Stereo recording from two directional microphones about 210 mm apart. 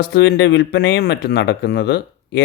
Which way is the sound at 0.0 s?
55° left (ahead or behind).